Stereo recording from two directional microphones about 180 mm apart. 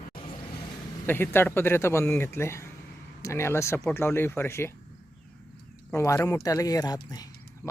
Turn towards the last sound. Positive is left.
turn(degrees=20)  # may be behind; listen again after turning